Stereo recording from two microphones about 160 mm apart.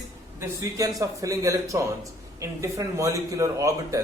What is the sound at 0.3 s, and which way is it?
A man's voice, 20° right (ahead or behind).